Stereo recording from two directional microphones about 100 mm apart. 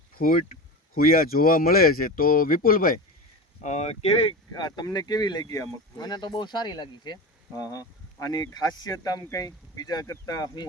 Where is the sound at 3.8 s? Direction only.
90° left.